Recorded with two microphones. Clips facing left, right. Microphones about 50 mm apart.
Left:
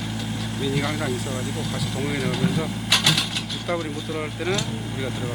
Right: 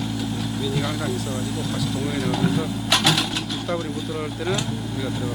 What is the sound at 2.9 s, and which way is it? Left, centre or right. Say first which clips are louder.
Mechanisms: right 2 dB; centre.